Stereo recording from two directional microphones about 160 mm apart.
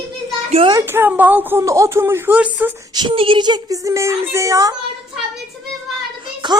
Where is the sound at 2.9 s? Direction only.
30° right (ahead or behind).